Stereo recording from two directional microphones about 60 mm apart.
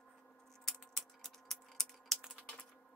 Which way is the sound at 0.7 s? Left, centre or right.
Centre.